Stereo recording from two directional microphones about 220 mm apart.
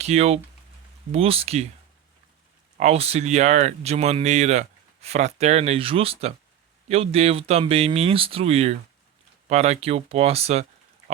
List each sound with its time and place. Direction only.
0.0 s speech: 30° right (ahead or behind)
2.7 s speech: 30° right (ahead or behind)